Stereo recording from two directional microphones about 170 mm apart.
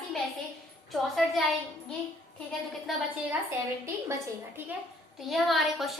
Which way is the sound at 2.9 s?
Centre (ahead or behind).